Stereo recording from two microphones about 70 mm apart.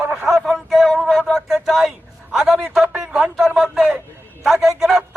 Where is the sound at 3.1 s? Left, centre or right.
Centre.